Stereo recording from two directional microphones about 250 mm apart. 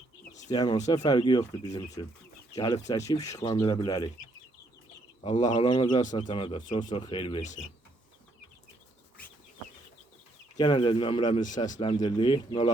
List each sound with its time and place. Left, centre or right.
0.3 s bird: left
1.0 s speech: centre
5.2 s speech: left
10.6 s speech: centre
11.3 s speech: left